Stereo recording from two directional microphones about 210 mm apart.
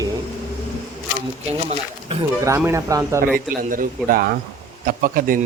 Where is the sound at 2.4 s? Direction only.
10° right (ahead or behind).